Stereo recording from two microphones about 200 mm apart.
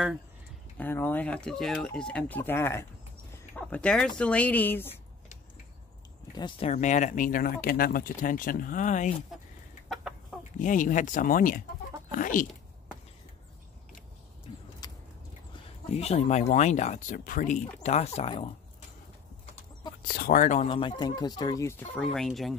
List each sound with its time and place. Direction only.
0.7 s speech: 10° left (ahead or behind)
6.3 s speech: 20° left (ahead or behind)
6.7 s speech: 35° left (ahead or behind)
9.8 s chicken: centre (ahead or behind)
10.6 s speech: 40° left (ahead or behind)
14.5 s vehicle: 30° left (ahead or behind)
15.9 s speech: 30° left (ahead or behind)
20.1 s speech: 50° left (ahead or behind); by 22.6 s centre (ahead or behind)